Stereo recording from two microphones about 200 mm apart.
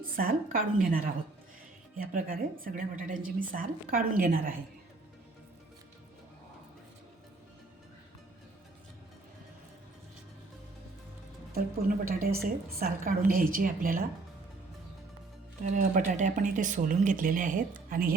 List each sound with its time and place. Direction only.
0.0 s a woman's voice: 45° right (ahead or behind)
11.5 s a woman's voice: 45° right (ahead or behind)
15.7 s speech: 40° right (ahead or behind)